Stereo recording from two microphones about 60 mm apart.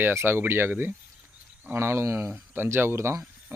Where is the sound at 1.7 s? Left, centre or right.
Right.